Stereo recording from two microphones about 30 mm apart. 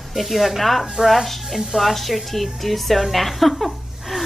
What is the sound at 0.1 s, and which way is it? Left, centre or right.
A woman's voice, centre.